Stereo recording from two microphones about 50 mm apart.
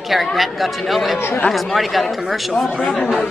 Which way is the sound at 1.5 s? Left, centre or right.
Centre.